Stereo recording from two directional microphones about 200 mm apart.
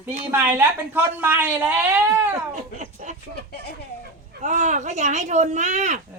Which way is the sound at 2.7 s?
35° right (ahead or behind).